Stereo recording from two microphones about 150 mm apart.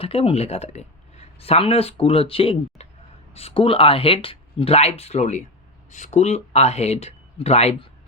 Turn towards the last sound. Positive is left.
turn(degrees=40)  # may be behind; listen again after turning